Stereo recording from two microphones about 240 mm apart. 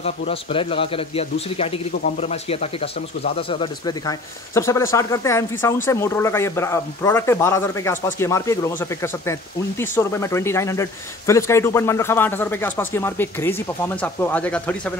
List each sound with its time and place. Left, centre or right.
0.0 s a man's voice: left; by 15.0 s centre